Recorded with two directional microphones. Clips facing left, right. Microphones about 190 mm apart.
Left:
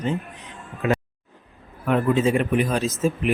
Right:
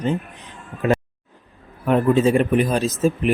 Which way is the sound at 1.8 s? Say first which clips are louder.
Right 3 dB; 35° right (ahead or behind).